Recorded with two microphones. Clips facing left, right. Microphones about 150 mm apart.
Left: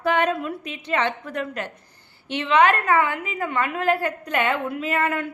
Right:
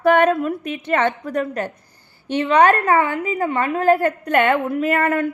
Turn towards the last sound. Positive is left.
turn(degrees=-50)  # may be behind; listen again after turning